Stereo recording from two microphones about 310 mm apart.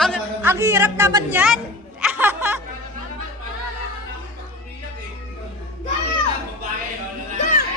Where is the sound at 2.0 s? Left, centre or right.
Centre.